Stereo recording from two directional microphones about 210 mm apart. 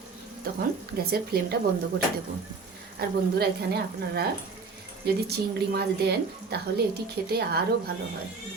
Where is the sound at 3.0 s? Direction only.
50° right (ahead or behind).